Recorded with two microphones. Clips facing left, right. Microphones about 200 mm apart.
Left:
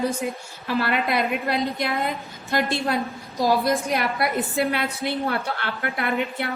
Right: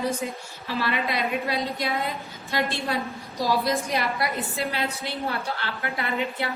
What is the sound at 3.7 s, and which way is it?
A woman's voice, 60° left (ahead or behind).